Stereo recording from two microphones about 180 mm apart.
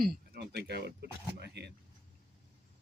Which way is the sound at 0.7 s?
65° right (ahead or behind).